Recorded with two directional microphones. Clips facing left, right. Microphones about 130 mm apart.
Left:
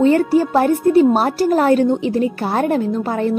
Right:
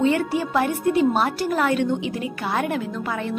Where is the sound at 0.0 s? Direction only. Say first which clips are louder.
Left 7 dB; 40° left (ahead or behind).